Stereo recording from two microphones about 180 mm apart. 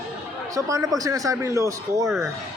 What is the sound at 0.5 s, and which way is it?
A man's voice, 20° right (ahead or behind).